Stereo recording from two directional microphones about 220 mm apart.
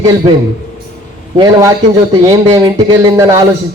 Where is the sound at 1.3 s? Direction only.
15° right (ahead or behind).